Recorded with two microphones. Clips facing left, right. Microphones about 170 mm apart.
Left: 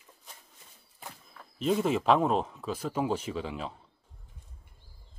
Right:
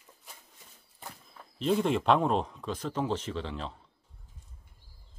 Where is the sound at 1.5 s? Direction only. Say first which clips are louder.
Even; 5° left (ahead or behind).